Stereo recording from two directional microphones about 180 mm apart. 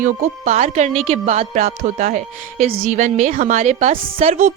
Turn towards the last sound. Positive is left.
turn(degrees=-40)  # may be behind; listen again after turning